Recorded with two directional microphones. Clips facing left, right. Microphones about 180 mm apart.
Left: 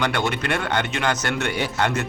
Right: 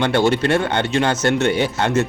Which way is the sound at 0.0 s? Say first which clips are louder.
Right 7 dB; 30° right (ahead or behind).